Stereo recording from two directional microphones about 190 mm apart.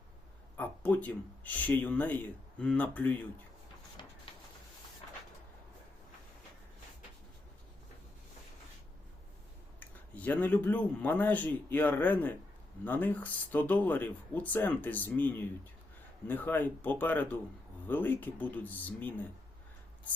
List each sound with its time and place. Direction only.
0.5 s speech: 10° left (ahead or behind)
4.3 s a sound: 30° left (ahead or behind)
9.8 s speech: 10° left (ahead or behind)